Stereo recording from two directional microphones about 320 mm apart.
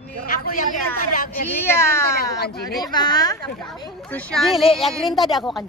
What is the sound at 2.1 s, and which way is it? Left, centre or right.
Speech, left.